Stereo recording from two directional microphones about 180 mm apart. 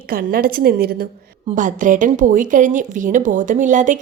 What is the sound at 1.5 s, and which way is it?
Speech, 45° right (ahead or behind).